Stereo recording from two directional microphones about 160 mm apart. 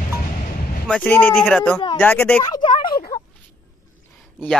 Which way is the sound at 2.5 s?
30° left (ahead or behind).